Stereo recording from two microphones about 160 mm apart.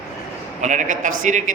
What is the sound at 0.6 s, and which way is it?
Speech, 50° right (ahead or behind).